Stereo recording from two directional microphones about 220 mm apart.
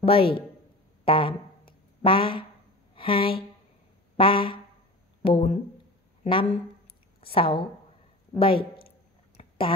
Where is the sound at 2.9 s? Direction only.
25° left (ahead or behind).